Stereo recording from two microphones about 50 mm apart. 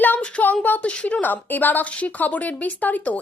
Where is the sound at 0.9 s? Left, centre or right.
Left.